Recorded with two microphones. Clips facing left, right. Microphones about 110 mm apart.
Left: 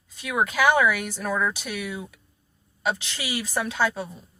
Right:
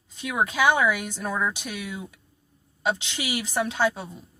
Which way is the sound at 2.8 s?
20° right (ahead or behind).